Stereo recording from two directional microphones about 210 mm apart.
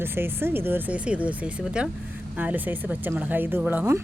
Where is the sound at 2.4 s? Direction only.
10° right (ahead or behind).